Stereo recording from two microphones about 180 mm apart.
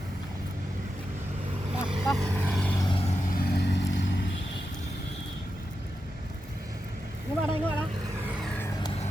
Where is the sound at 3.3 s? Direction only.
60° left (ahead or behind); by 4.2 s 80° left.